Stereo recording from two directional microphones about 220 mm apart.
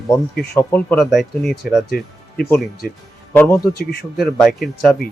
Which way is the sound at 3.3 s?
10° left (ahead or behind).